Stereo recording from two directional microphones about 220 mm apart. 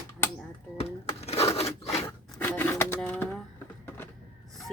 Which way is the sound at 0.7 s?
25° left (ahead or behind).